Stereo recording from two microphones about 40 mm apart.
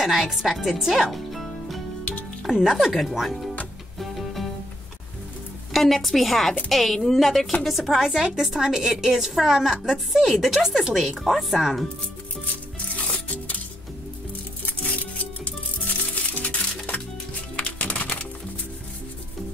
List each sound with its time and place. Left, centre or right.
0.0 s a woman's voice: centre
1.1 s music: centre
2.5 s speech: centre
4.0 s music: centre
5.7 s a woman's voice: centre
12.9 s music: left
14.7 s music: left